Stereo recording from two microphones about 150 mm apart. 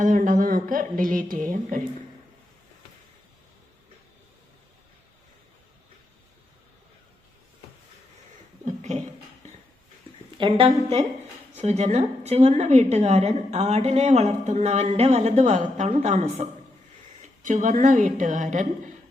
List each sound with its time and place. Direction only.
0.0 s speech: 60° right (ahead or behind)
8.6 s a sound: 50° right (ahead or behind)
10.3 s a woman's voice: 35° right (ahead or behind); by 18.4 s 55° right (ahead or behind)